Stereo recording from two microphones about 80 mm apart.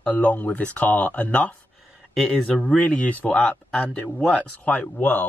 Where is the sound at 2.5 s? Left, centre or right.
Centre.